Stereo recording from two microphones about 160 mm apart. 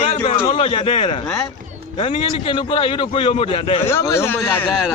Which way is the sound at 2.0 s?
35° left (ahead or behind).